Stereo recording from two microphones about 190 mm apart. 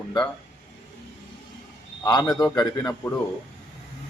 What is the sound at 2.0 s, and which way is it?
Speech, 20° left (ahead or behind).